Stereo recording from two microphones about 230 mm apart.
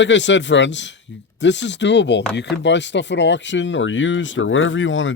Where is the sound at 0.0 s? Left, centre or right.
Left.